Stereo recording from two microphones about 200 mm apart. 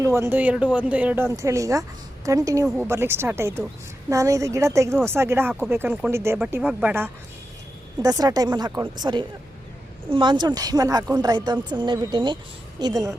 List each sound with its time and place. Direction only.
0.0 s speech: 15° right (ahead or behind)